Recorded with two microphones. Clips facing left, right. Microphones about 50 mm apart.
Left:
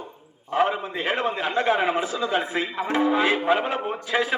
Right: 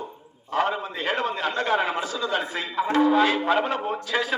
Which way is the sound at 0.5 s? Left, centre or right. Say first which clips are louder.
Left 2 dB; centre.